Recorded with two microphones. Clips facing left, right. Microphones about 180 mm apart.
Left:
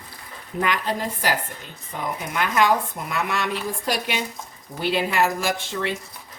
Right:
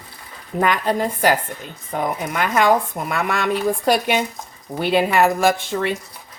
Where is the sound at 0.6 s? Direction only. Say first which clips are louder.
Right 6 dB; 50° right (ahead or behind).